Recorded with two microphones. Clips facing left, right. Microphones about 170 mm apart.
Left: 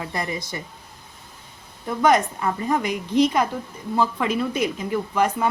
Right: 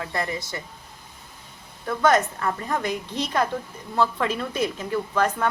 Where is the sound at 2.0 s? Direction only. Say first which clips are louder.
Left 2 dB; 15° left (ahead or behind).